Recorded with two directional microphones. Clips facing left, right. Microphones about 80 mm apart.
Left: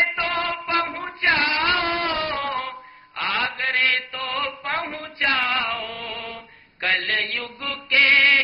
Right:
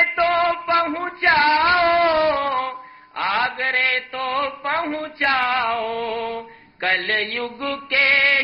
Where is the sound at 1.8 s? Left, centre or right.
Right.